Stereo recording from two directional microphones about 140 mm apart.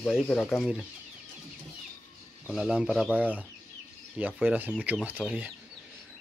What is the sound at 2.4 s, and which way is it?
Speech, centre (ahead or behind).